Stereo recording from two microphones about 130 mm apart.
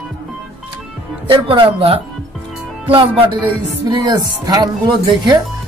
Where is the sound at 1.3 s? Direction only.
40° right (ahead or behind).